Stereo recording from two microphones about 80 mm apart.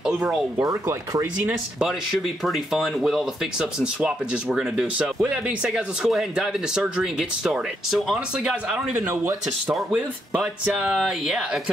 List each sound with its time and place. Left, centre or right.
0.0 s speech: centre
1.8 s speech: centre
9.1 s speech: right
9.9 s speech: centre